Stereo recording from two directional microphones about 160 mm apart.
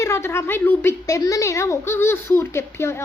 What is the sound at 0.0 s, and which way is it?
A woman's voice, 15° left (ahead or behind).